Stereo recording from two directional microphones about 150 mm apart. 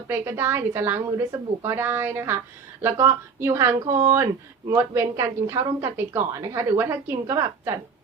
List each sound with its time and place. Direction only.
0.1 s a woman's voice: 15° right (ahead or behind)